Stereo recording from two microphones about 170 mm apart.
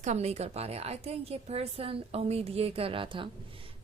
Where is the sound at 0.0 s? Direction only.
40° right (ahead or behind).